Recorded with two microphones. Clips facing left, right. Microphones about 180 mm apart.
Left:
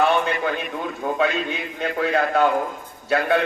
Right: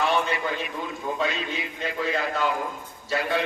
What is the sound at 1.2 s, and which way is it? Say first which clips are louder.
A man's voice: left 7 dB; 60° left (ahead or behind).